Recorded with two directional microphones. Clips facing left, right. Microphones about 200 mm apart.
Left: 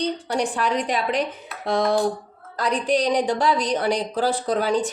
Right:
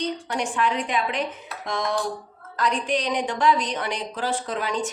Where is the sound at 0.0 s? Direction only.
35° left (ahead or behind).